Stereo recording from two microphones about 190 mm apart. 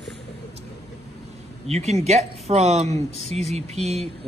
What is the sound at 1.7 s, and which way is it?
Speech, 35° right (ahead or behind).